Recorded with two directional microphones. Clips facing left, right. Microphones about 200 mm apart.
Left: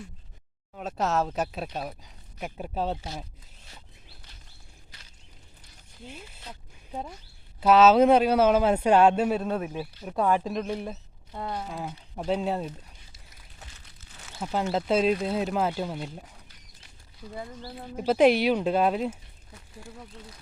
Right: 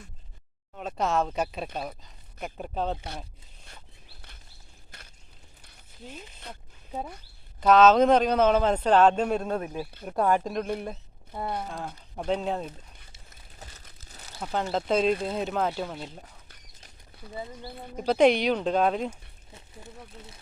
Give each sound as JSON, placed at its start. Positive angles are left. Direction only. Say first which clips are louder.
{"t": 0.7, "sound": "speech", "louder": "even", "side_deg": 5}
{"t": 4.9, "sound": "a sound", "louder": "right 7 dB", "side_deg": -55}
{"t": 6.1, "sound": "speech", "louder": "right 1 dB", "side_deg": 10}
{"t": 7.6, "sound": "speech", "louder": "even", "side_deg": 5}
{"t": 13.6, "sound": "crumpling", "louder": "right 3 dB", "side_deg": -40}
{"t": 14.3, "sound": "speech", "louder": "left 1 dB", "side_deg": 5}
{"t": 17.6, "sound": "speech", "louder": "left 2 dB", "side_deg": 5}
{"t": 19.5, "sound": "speech", "louder": "left 1 dB", "side_deg": -25}